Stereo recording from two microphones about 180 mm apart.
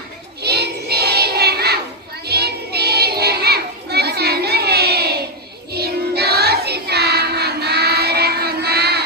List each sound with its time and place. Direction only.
0.4 s child singing: 65° right (ahead or behind)
2.2 s children playing: 60° right (ahead or behind)
5.7 s child singing: 60° right (ahead or behind)